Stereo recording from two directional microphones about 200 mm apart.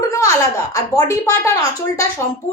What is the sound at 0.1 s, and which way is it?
A woman's voice, 15° left (ahead or behind).